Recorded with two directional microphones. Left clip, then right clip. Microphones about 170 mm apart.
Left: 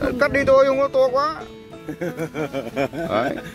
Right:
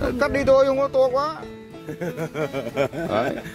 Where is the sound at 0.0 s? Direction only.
25° right (ahead or behind).